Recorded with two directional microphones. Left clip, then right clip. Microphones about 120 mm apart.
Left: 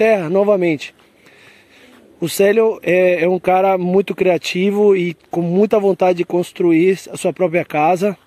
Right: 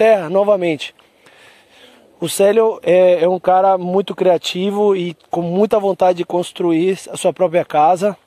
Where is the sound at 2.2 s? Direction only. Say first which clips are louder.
Right 1 dB; 25° right (ahead or behind).